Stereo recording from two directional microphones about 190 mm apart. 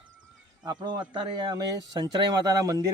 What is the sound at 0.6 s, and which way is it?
Speech, 20° right (ahead or behind).